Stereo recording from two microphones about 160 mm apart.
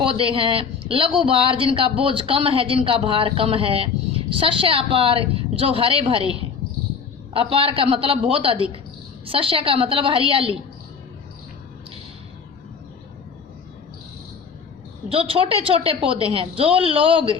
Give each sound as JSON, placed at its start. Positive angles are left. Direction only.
{"t": 0.0, "sound": "speech", "side_deg": -35}
{"t": 15.1, "sound": "speech", "side_deg": -35}